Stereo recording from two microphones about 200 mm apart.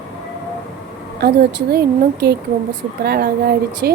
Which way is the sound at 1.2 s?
50° right (ahead or behind).